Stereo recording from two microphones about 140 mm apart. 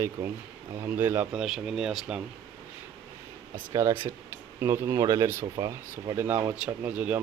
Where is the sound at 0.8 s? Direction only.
15° right (ahead or behind).